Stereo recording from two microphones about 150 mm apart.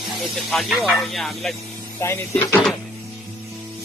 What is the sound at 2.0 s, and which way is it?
Speech, 20° left (ahead or behind).